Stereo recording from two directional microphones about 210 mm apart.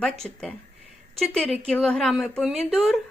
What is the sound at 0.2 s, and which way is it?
Speech, 5° left (ahead or behind).